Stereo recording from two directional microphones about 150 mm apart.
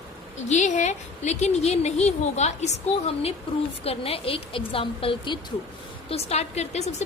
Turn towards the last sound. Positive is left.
turn(degrees=50)  # may be behind; listen again after turning